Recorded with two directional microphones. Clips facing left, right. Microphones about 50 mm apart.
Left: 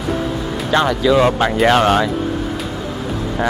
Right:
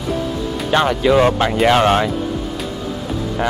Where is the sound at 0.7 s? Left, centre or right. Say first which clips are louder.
Even; right.